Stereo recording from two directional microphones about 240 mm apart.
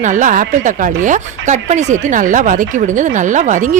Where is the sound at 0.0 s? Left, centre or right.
Right.